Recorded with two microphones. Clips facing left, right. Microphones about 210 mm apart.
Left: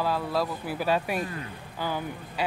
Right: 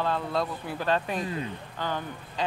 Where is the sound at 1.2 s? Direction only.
20° right (ahead or behind).